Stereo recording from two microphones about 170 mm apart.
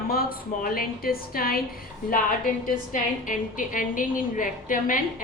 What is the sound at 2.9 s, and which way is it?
A woman's voice, 50° left (ahead or behind).